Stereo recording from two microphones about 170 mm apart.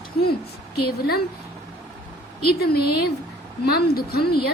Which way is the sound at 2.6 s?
65° left (ahead or behind).